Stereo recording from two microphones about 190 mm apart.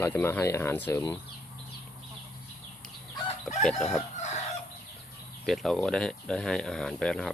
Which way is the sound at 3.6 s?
Centre (ahead or behind).